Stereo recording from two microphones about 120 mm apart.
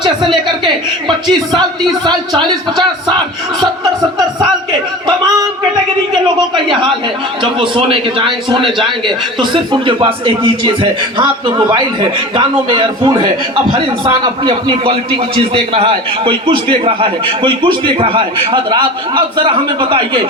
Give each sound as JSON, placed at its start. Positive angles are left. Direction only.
{"t": 0.0, "sound": "speech", "side_deg": -40}
{"t": 5.0, "sound": "a man's voice", "side_deg": -40}